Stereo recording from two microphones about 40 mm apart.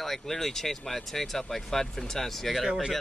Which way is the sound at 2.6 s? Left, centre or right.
Centre.